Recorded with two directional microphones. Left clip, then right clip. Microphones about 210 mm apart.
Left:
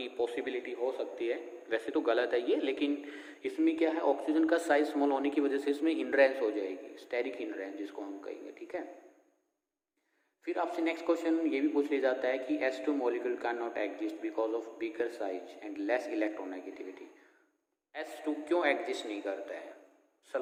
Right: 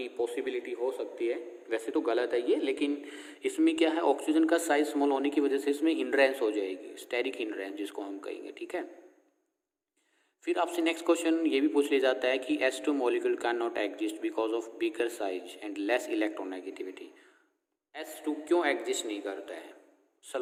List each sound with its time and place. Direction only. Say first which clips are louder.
0.0 s a man's voice: right 2 dB; 20° right (ahead or behind); by 8.9 s 40° right (ahead or behind)
10.4 s a man's voice: right 4 dB; 40° right (ahead or behind)